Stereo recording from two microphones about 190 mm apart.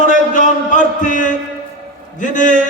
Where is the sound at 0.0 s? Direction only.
40° left (ahead or behind).